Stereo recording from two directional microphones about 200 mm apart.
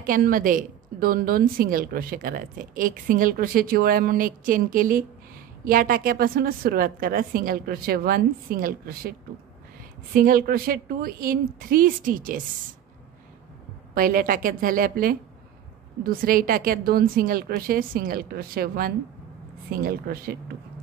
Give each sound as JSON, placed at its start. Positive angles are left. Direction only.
{"t": 0.0, "sound": "a woman's voice", "side_deg": -45}
{"t": 10.1, "sound": "a woman's voice", "side_deg": -45}
{"t": 13.9, "sound": "a woman's voice", "side_deg": -45}